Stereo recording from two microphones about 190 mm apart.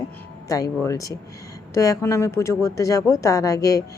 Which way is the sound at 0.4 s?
20° left (ahead or behind).